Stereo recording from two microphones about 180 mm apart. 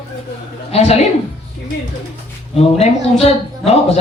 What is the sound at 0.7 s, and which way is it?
Speech, 35° left (ahead or behind).